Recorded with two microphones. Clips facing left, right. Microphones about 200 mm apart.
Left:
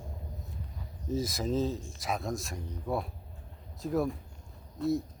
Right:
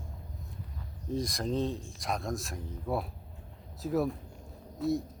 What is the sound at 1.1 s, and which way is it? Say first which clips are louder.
Speech: left 1 dB; 5° left (ahead or behind).